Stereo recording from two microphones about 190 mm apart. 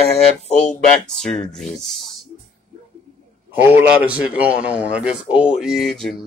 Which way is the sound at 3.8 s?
5° right (ahead or behind).